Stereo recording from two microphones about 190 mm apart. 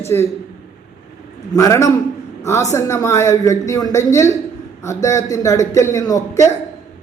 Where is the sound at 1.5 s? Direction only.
15° left (ahead or behind).